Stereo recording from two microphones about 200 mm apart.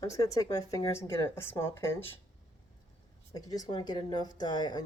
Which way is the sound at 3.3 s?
20° left (ahead or behind).